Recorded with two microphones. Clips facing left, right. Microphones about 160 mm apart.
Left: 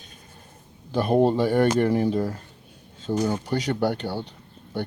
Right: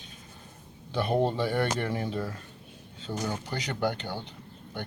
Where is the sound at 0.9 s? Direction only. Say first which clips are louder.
Left 7 dB; 45° left (ahead or behind).